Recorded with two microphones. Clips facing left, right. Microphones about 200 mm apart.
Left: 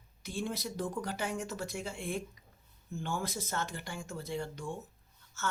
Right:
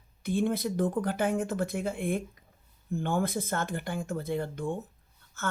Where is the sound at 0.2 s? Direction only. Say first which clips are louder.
Right 9 dB; 55° right (ahead or behind).